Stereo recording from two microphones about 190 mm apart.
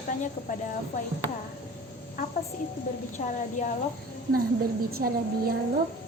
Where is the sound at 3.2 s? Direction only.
40° left (ahead or behind).